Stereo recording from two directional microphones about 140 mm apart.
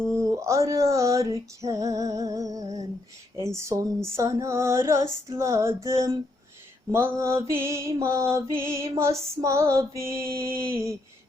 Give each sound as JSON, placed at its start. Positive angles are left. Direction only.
{"t": 0.2, "sound": "mantra", "side_deg": -20}